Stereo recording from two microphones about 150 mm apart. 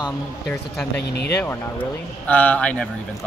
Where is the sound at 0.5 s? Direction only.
5° left (ahead or behind).